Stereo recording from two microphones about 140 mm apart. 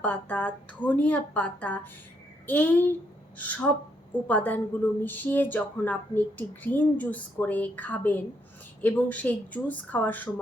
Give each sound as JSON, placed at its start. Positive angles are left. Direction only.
{"t": 0.0, "sound": "a woman's voice", "side_deg": 10}